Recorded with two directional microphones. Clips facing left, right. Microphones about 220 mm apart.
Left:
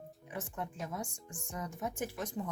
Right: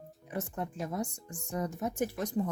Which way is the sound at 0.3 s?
40° right (ahead or behind).